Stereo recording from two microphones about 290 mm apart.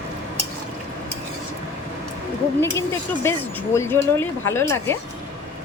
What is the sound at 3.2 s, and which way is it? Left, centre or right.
Speech, centre.